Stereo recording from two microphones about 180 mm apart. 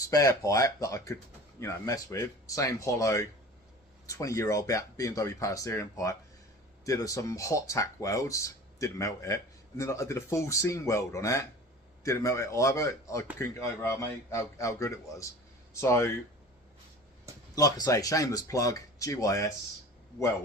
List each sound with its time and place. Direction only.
0.0 s speech: 20° left (ahead or behind)
17.5 s speech: 20° left (ahead or behind)